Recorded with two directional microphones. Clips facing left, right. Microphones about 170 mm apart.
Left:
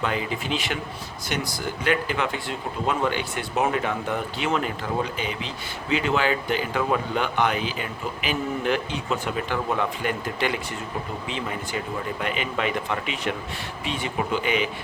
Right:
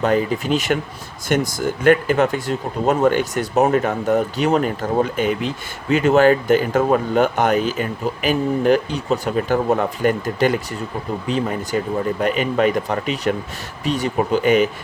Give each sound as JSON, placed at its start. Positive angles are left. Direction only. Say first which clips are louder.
{"t": 0.0, "sound": "speech", "louder": "right 9 dB", "side_deg": -40}